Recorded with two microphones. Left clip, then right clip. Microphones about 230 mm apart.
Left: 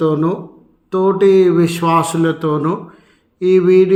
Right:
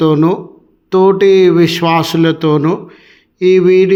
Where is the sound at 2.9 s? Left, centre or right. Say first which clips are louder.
Right 5 dB; right.